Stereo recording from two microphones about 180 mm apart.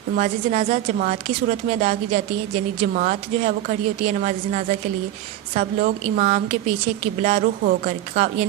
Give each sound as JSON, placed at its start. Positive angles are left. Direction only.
{"t": 0.2, "sound": "a woman's voice", "side_deg": -40}